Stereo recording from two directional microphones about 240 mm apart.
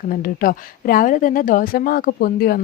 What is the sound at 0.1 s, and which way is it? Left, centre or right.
A woman's voice, left.